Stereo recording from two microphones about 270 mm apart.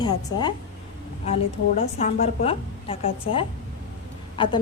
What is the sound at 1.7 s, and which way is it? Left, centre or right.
A woman's voice, left.